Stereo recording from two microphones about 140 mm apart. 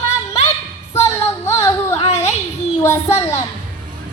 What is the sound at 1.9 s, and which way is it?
Singing, 50° left (ahead or behind).